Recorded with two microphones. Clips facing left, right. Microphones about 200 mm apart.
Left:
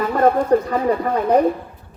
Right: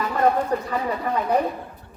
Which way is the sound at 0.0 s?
50° left (ahead or behind).